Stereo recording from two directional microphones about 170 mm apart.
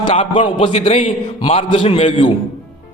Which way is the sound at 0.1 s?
30° left (ahead or behind).